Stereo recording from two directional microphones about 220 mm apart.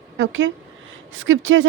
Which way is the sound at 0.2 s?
60° right (ahead or behind).